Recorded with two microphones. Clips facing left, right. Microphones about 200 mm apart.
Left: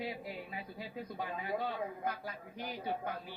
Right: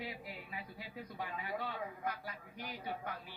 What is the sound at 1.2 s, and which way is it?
Speech, 35° left (ahead or behind).